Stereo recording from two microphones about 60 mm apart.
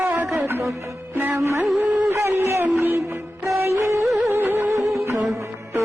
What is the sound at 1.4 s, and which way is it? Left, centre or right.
Music, right.